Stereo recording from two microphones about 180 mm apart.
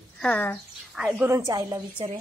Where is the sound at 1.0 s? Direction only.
10° right (ahead or behind).